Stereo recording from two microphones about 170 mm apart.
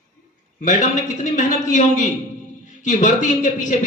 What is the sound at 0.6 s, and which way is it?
A man's voice, 50° left (ahead or behind).